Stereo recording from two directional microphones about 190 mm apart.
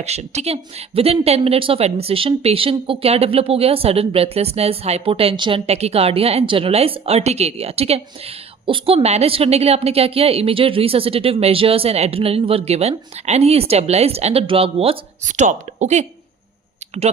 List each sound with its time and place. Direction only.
0.0 s speech: 35° right (ahead or behind)